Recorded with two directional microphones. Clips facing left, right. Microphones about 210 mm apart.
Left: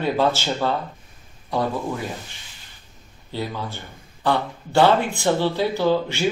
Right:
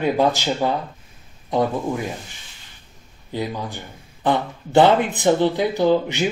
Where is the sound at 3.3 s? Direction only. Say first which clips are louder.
Right 2 dB; 15° right (ahead or behind).